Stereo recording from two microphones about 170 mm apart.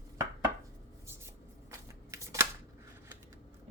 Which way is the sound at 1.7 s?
20° right (ahead or behind).